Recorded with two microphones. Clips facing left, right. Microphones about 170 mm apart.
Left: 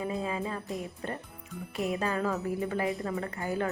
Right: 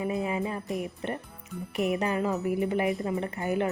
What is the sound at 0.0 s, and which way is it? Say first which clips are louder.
Music: right 3 dB; 20° right (ahead or behind).